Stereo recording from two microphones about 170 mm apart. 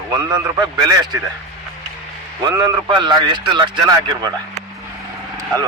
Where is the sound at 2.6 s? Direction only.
25° right (ahead or behind).